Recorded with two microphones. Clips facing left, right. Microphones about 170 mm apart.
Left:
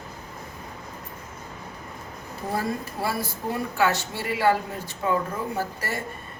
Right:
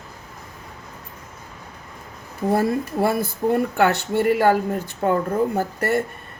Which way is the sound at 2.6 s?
55° right (ahead or behind).